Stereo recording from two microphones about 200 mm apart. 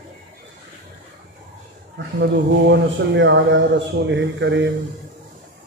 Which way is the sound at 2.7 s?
60° right (ahead or behind).